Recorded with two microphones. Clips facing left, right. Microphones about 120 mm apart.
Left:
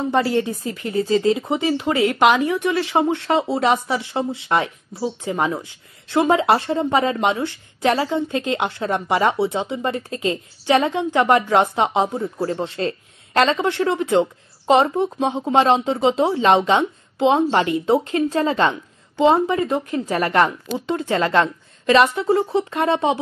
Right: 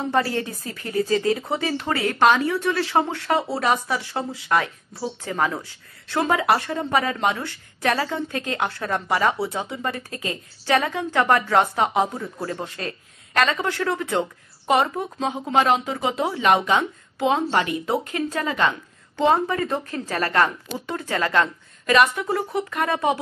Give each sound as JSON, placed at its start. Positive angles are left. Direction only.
{"t": 0.1, "sound": "speech", "side_deg": 20}
{"t": 19.1, "sound": "speech", "side_deg": 15}